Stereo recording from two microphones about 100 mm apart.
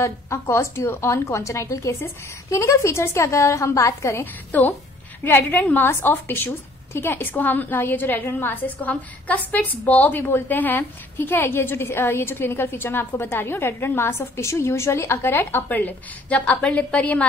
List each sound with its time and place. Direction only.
0.0 s a woman's voice: 30° left (ahead or behind); by 17.2 s 15° left (ahead or behind)